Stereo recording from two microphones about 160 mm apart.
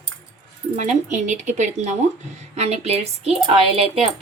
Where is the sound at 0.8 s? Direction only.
50° right (ahead or behind).